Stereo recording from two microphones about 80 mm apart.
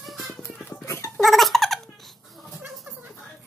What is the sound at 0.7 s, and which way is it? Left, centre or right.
Dog, left.